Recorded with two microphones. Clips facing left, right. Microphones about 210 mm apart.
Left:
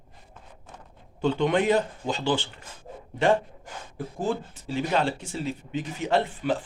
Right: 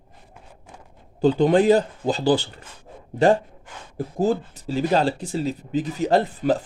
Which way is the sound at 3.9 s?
40° right (ahead or behind).